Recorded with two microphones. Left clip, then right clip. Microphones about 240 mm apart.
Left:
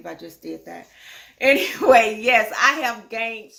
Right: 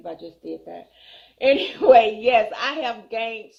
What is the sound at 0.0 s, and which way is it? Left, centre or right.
Speech, left.